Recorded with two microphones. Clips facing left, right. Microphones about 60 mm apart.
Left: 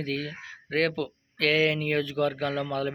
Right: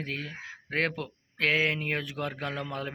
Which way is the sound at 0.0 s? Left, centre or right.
Right.